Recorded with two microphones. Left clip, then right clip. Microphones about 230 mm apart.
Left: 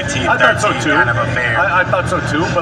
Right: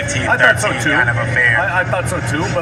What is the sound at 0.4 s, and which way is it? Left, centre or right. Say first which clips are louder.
Speech: right 1 dB; right.